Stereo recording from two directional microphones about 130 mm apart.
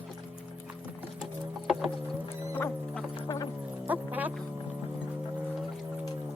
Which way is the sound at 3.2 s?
25° left (ahead or behind).